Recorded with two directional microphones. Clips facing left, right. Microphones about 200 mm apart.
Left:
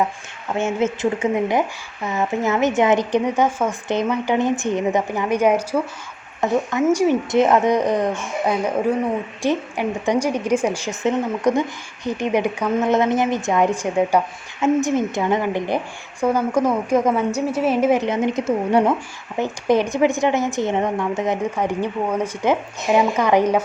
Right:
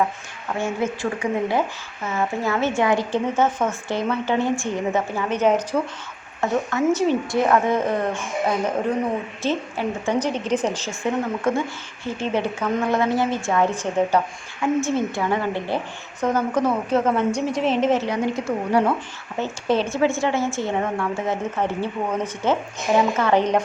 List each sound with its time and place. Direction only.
0.6 s a woman's voice: 25° left (ahead or behind)